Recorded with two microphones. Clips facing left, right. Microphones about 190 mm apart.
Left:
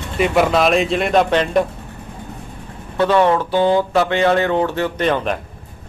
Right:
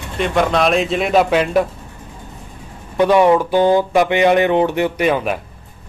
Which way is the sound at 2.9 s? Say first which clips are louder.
Right 3 dB; 15° right (ahead or behind).